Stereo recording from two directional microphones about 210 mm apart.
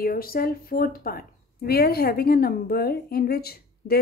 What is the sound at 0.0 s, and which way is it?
A woman's voice, 45° left (ahead or behind).